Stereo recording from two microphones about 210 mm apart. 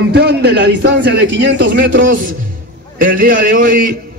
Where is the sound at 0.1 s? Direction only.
55° right (ahead or behind).